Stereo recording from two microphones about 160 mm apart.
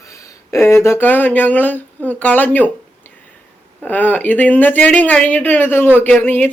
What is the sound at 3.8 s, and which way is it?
Speech, 10° left (ahead or behind).